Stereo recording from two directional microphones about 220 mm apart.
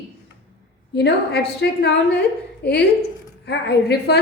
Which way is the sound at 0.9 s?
50° left (ahead or behind).